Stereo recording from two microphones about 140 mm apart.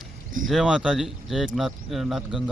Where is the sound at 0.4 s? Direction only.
5° right (ahead or behind).